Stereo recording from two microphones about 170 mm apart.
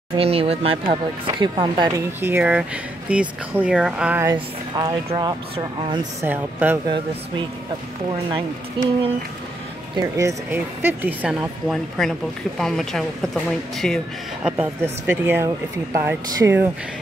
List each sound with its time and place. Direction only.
0.1 s speech: 35° right (ahead or behind)
2.2 s speech: 10° right (ahead or behind)
4.3 s speech: 25° right (ahead or behind)
6.2 s speech: 10° right (ahead or behind)
8.8 s speech: 30° right (ahead or behind)
9.9 s speech: 20° right (ahead or behind); by 14.5 s centre (ahead or behind)
14.6 s speech: 15° right (ahead or behind)